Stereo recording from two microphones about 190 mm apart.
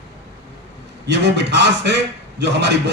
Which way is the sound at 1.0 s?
65° right (ahead or behind).